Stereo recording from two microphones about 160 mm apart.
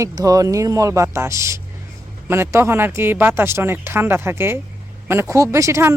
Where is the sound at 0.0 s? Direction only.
20° right (ahead or behind).